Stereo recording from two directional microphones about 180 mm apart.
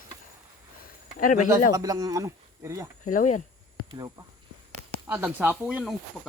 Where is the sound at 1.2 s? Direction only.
50° left (ahead or behind).